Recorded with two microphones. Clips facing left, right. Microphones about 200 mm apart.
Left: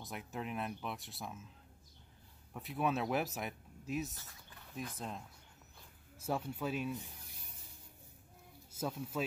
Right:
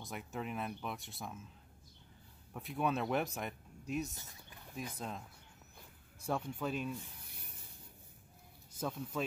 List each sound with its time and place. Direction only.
0.0 s speech: centre (ahead or behind)
2.5 s speech: centre (ahead or behind)
4.1 s speech: 20° right (ahead or behind)
4.9 s speech: centre (ahead or behind)
6.2 s speech: 5° left (ahead or behind)
8.7 s speech: 5° left (ahead or behind)